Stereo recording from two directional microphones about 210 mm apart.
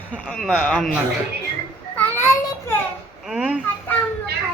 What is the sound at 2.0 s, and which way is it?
Child singing, 10° left (ahead or behind).